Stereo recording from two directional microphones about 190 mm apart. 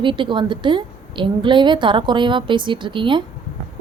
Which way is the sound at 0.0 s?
25° right (ahead or behind).